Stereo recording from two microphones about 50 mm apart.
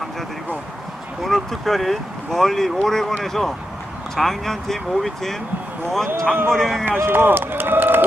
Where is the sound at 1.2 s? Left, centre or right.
Centre.